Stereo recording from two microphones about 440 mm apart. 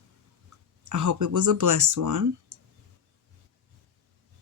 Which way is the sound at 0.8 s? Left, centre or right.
Right.